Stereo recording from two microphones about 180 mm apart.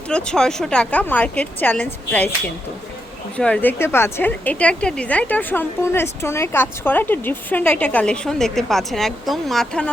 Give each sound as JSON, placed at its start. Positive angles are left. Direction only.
{"t": 0.1, "sound": "a woman's voice", "side_deg": 5}
{"t": 3.3, "sound": "a woman's voice", "side_deg": 5}